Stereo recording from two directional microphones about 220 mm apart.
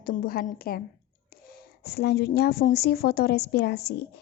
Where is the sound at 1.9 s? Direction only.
45° left (ahead or behind).